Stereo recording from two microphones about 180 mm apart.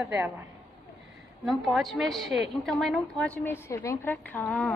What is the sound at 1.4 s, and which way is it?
A woman's voice, centre (ahead or behind).